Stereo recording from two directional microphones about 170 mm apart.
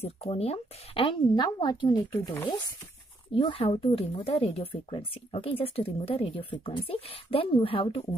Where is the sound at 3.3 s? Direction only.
30° left (ahead or behind).